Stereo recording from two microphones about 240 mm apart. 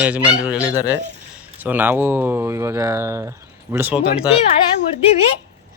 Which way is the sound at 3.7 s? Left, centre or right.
Centre.